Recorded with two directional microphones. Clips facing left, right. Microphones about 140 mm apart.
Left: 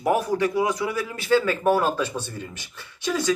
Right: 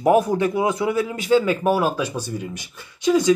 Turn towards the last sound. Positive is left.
turn(degrees=-15)  # may be behind; listen again after turning